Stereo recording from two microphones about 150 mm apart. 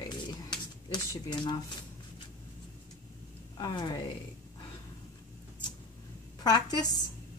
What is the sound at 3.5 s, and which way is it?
Speech, 30° left (ahead or behind).